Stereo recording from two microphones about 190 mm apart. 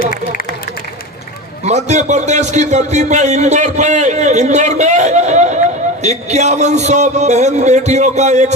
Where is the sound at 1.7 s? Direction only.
35° right (ahead or behind).